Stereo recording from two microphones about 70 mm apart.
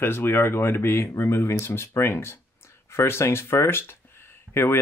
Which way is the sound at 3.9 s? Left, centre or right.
Left.